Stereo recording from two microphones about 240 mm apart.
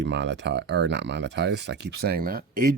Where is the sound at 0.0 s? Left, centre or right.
Right.